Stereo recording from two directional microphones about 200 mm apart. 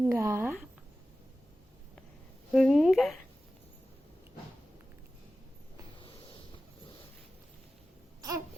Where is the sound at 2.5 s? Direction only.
Centre (ahead or behind).